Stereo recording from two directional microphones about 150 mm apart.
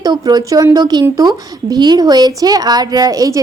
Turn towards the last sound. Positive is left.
turn(degrees=-25)  # may be behind; listen again after turning